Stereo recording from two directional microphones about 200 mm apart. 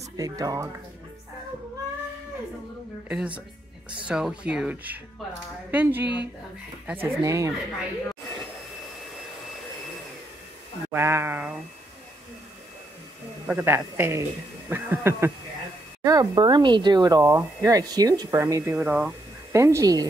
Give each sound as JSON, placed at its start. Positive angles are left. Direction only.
{"t": 0.2, "sound": "speech", "side_deg": -15}
{"t": 3.1, "sound": "speech", "side_deg": -5}
{"t": 10.9, "sound": "speech", "side_deg": -10}
{"t": 13.5, "sound": "speech", "side_deg": -10}